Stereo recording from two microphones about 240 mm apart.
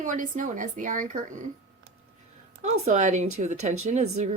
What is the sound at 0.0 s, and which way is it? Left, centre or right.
A woman's voice, right.